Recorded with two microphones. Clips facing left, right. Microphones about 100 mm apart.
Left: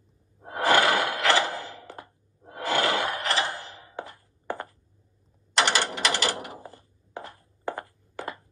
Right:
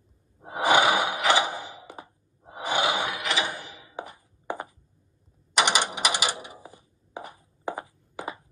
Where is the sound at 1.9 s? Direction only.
10° right (ahead or behind).